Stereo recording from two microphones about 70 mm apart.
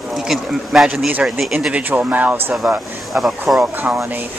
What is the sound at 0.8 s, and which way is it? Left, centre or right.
Speech, centre.